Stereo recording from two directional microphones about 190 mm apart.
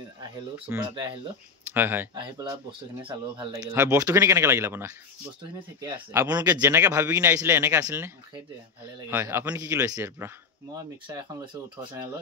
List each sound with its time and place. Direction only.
0.8 s speech: 25° right (ahead or behind)
1.7 s speech: 10° right (ahead or behind)
2.1 s speech: 25° right (ahead or behind)
3.6 s speech: 15° right (ahead or behind)
9.1 s speech: 10° right (ahead or behind)